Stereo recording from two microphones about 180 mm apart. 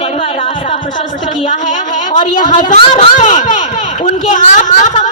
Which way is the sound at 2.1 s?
45° left (ahead or behind).